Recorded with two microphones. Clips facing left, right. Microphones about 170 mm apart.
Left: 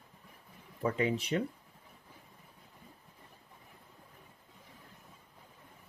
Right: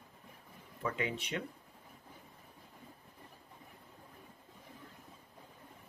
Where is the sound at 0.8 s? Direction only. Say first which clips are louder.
Left 6 dB; 35° left (ahead or behind).